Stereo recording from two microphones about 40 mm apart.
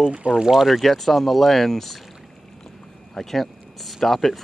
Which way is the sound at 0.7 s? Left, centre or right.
Centre.